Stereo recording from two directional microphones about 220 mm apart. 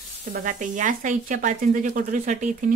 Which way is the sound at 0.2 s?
35° right (ahead or behind).